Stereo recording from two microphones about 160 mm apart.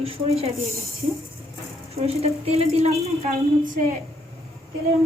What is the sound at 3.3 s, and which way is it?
Speech, 55° right (ahead or behind).